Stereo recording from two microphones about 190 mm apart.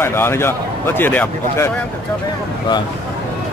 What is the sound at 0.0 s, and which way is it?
Speech, 10° left (ahead or behind).